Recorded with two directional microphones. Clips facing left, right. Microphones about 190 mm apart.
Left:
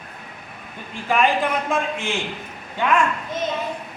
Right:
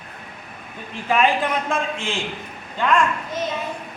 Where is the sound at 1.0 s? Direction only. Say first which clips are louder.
Right 1 dB; centre (ahead or behind).